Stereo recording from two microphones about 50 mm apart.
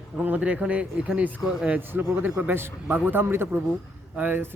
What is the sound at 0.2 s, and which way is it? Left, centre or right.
Speech, right.